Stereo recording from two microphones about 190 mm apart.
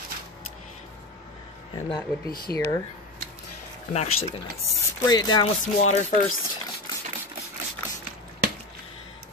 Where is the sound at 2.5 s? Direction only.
10° left (ahead or behind).